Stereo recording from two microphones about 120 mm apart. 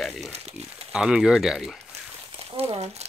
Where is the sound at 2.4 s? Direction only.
55° right (ahead or behind).